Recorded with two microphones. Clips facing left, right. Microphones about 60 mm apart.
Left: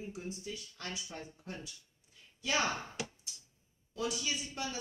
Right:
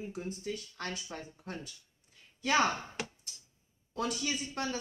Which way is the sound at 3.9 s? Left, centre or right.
Right.